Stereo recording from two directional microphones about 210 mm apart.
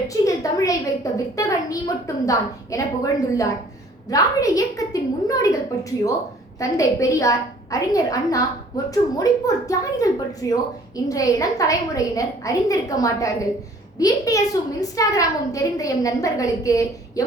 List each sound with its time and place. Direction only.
0.1 s a woman's voice: 15° left (ahead or behind)
6.6 s a woman's voice: 15° left (ahead or behind)